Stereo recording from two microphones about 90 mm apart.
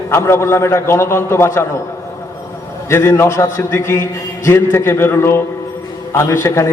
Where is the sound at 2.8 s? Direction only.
30° left (ahead or behind).